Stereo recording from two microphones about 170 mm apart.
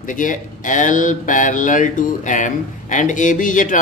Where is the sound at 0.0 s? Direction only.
50° left (ahead or behind).